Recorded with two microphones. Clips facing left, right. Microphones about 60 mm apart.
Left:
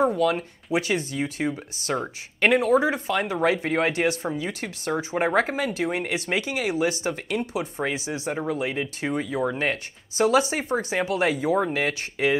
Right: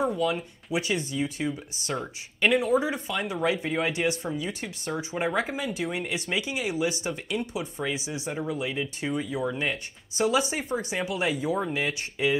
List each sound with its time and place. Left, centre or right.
0.2 s speech: left
1.9 s speech: left
2.4 s speech: left
2.8 s speech: left